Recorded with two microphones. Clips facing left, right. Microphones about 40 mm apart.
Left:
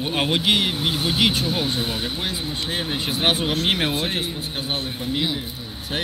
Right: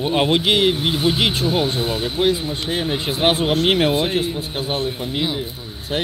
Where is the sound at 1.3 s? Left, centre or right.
Right.